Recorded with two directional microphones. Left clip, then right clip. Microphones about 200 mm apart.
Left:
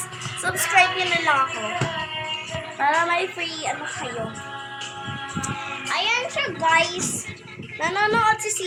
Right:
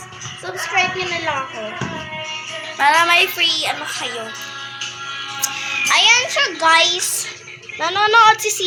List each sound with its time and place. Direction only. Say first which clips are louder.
0.4 s a woman's voice: left 1 dB; 5° left (ahead or behind)
2.7 s speech: right 7 dB; 5° right (ahead or behind)
5.9 s a child's voice: right 10 dB; 20° right (ahead or behind)
6.1 s a woman's voice: right 7 dB; centre (ahead or behind)
6.6 s a woman's voice: right 5 dB; 20° right (ahead or behind)